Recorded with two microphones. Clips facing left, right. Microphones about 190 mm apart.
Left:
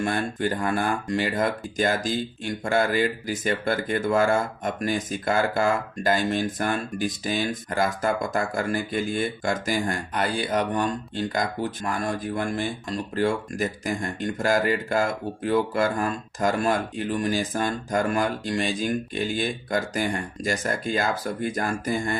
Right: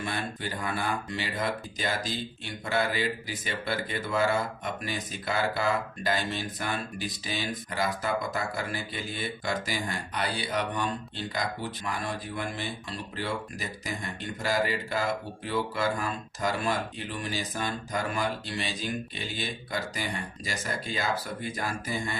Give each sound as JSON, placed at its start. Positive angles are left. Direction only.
{"t": 0.0, "sound": "speech", "side_deg": 50}